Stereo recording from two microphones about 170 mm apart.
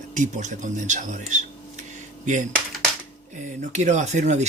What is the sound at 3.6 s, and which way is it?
Mantra, 45° right (ahead or behind).